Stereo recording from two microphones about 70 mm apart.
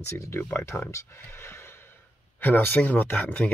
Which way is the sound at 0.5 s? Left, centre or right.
Left.